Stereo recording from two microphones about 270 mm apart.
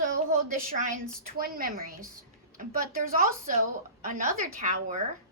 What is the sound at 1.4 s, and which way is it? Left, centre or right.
A woman's voice, right.